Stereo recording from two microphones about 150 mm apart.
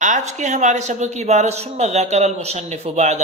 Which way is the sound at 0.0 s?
55° right (ahead or behind).